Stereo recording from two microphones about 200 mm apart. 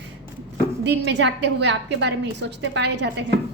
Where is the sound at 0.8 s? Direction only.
60° right (ahead or behind).